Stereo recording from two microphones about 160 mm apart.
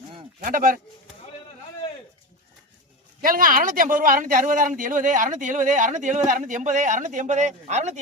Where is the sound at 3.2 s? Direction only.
60° right (ahead or behind); by 8.0 s 45° right (ahead or behind).